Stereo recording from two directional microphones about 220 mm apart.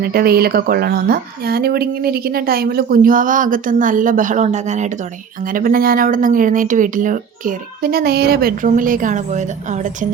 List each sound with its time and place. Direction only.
0.0 s speech: 45° right (ahead or behind)